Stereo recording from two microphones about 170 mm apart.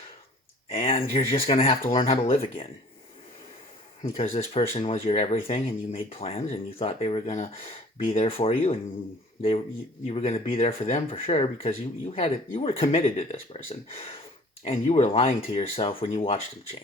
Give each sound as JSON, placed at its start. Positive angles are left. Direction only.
{"t": 0.8, "sound": "speech", "side_deg": 35}
{"t": 4.2, "sound": "speech", "side_deg": 35}
{"t": 10.1, "sound": "speech", "side_deg": 40}